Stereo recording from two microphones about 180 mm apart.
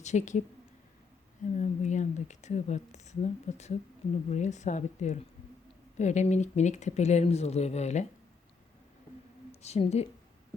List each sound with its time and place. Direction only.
0.0 s speech: 40° left (ahead or behind)
1.5 s speech: 40° left (ahead or behind)
9.5 s speech: 35° left (ahead or behind)